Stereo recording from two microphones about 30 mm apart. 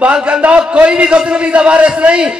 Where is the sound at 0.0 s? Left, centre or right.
Right.